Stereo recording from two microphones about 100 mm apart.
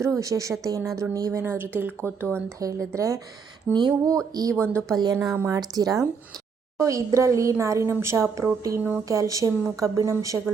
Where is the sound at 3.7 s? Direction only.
45° right (ahead or behind).